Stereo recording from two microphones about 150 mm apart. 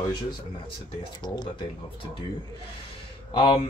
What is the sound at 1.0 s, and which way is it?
Speech, 30° left (ahead or behind).